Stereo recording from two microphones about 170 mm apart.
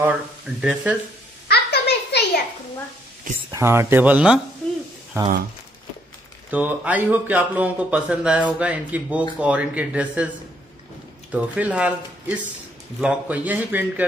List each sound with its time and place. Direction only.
0.0 s speech: 10° right (ahead or behind)
1.5 s a sound: 75° left (ahead or behind)
3.5 s speech: 15° right (ahead or behind)
6.5 s speech: 10° right (ahead or behind)
11.3 s speech: 10° right (ahead or behind)